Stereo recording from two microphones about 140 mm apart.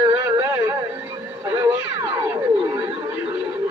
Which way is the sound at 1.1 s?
30° right (ahead or behind).